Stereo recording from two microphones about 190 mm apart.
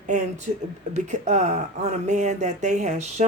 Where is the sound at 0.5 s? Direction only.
40° right (ahead or behind).